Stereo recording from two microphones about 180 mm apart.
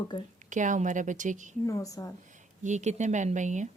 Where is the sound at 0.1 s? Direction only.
25° left (ahead or behind).